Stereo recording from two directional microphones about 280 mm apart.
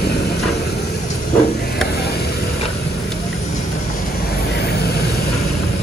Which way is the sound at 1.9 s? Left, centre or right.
Left.